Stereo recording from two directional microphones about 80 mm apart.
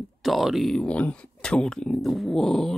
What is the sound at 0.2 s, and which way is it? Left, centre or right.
Speech, centre.